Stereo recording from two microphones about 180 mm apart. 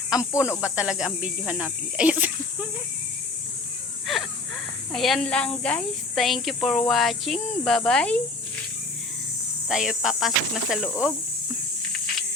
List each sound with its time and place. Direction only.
0.2 s speech: 15° left (ahead or behind)
0.6 s speech: 5° right (ahead or behind)
4.0 s wheeze: centre (ahead or behind)
4.9 s speech: centre (ahead or behind)
9.6 s speech: 5° right (ahead or behind)